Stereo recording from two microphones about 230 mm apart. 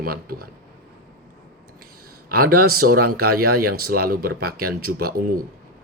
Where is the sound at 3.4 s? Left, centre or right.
Right.